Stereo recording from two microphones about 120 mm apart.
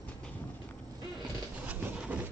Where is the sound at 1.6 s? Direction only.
10° right (ahead or behind).